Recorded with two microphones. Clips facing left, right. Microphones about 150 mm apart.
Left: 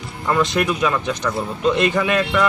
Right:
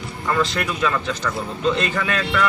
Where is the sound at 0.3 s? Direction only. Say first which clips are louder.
Left 3 dB; 15° left (ahead or behind).